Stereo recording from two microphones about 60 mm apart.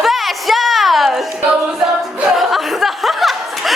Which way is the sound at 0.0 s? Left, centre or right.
Centre.